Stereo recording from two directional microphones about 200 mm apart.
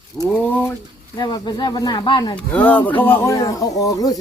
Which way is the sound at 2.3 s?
5° left (ahead or behind).